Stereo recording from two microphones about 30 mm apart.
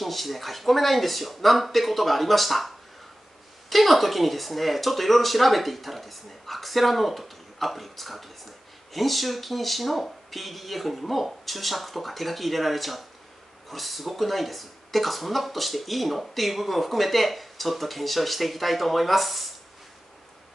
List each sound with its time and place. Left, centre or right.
0.0 s speech: centre
3.7 s speech: centre